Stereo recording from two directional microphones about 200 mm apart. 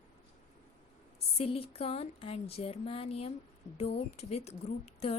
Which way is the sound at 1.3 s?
30° left (ahead or behind).